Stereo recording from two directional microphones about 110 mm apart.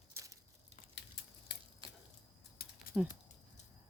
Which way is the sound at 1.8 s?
50° right (ahead or behind).